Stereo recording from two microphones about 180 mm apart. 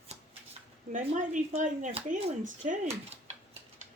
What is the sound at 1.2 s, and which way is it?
Speech, 45° right (ahead or behind).